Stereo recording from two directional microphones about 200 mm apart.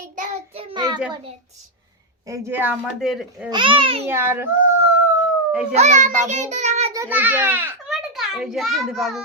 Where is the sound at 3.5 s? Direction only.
25° right (ahead or behind).